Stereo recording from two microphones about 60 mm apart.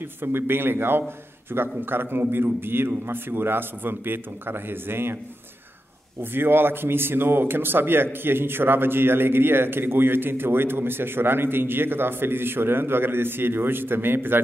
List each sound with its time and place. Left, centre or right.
0.2 s a man's voice: right
6.3 s a man's voice: right